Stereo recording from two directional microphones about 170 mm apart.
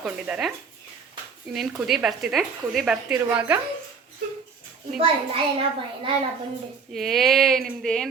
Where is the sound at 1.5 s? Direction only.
Centre (ahead or behind).